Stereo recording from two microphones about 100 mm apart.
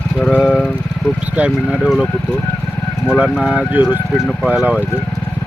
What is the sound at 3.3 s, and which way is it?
Speech, 10° right (ahead or behind).